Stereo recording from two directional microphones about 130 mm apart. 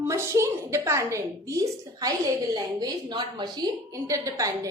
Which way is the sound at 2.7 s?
35° right (ahead or behind).